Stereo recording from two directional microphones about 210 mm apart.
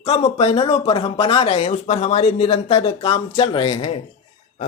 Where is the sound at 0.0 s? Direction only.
30° left (ahead or behind).